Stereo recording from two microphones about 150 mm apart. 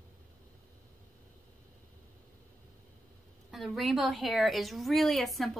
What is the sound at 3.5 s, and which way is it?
A woman's voice, centre (ahead or behind).